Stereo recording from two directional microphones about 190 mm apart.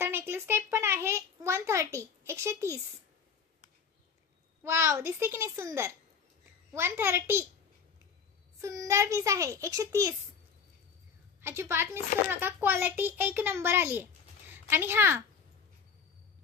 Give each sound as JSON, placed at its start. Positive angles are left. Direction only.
{"t": 0.0, "sound": "a child's voice", "side_deg": -10}
{"t": 4.6, "sound": "a child's voice", "side_deg": -15}
{"t": 8.5, "sound": "a child's voice", "side_deg": -15}
{"t": 11.4, "sound": "a child's voice", "side_deg": -15}